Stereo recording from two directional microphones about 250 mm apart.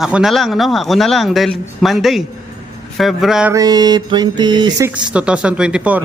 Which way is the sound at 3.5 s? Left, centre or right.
Centre.